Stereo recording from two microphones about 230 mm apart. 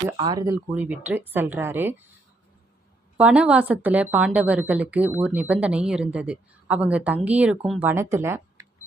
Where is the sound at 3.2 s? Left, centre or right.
Centre.